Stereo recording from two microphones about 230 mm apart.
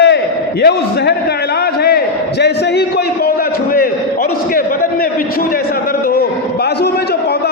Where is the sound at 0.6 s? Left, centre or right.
Left.